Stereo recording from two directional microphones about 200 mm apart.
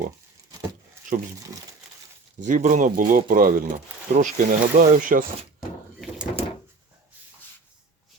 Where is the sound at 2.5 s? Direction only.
40° right (ahead or behind).